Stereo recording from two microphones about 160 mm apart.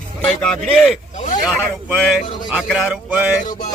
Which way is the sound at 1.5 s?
Centre (ahead or behind).